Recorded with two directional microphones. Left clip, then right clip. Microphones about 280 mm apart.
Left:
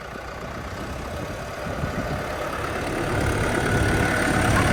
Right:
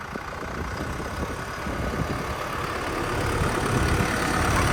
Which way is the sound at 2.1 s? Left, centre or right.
Right.